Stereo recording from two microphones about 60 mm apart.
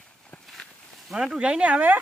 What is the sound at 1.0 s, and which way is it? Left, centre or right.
Speech, centre.